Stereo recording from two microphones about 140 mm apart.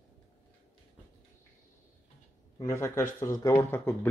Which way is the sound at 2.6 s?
20° left (ahead or behind).